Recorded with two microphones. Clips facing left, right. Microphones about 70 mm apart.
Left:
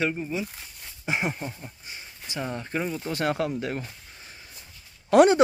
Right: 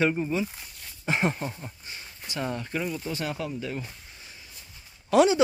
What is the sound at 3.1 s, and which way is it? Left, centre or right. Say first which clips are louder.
Speech: left 6 dB; left.